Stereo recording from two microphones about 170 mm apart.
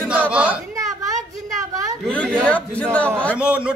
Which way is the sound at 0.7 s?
20° right (ahead or behind).